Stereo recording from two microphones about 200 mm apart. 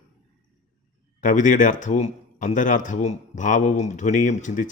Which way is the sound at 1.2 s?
40° left (ahead or behind).